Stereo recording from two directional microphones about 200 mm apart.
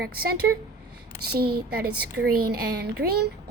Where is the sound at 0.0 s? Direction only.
50° right (ahead or behind).